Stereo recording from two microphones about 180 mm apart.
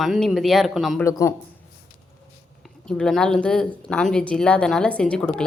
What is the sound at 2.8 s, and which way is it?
A woman's voice, 5° left (ahead or behind).